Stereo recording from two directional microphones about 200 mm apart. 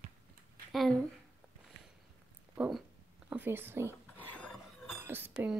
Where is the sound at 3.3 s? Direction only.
10° right (ahead or behind).